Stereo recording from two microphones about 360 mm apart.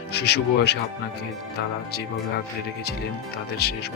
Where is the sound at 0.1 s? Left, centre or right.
Left.